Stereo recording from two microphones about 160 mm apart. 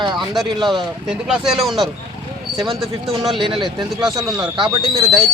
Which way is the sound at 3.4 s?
30° right (ahead or behind).